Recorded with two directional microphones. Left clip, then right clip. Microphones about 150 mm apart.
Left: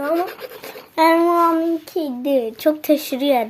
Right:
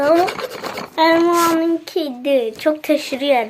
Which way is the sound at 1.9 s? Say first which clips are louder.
Right 2 dB; 30° left (ahead or behind).